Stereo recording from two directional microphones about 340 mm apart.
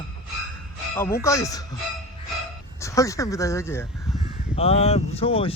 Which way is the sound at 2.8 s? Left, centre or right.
Centre.